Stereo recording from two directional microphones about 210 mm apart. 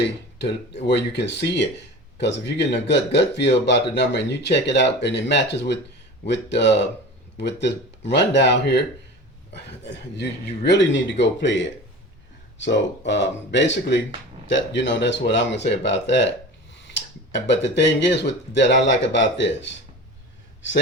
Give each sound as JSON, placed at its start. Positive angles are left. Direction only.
{"t": 0.3, "sound": "speech", "side_deg": 55}
{"t": 17.3, "sound": "speech", "side_deg": 55}